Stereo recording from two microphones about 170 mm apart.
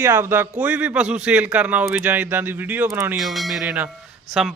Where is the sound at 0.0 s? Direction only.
10° right (ahead or behind).